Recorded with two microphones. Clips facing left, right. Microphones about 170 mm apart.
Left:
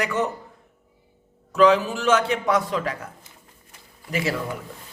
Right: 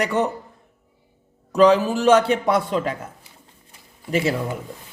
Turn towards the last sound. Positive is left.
turn(degrees=-25)  # may be behind; listen again after turning